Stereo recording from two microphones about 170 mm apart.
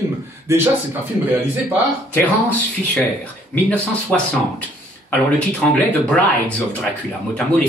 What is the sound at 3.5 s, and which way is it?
Speech, 5° left (ahead or behind).